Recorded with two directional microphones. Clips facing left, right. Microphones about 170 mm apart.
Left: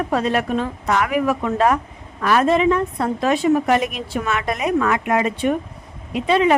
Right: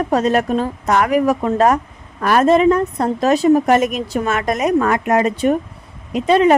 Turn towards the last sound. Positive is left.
turn(degrees=-40)  # may be behind; listen again after turning